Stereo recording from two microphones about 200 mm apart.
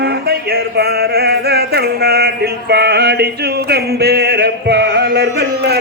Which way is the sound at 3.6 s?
55° right (ahead or behind).